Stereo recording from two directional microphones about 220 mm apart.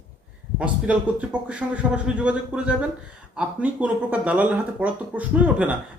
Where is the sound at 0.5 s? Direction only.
5° right (ahead or behind).